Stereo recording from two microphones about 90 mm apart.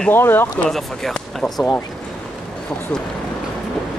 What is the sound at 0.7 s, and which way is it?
Speech, 5° left (ahead or behind).